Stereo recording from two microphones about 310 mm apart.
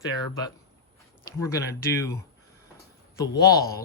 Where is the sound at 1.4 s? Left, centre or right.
Centre.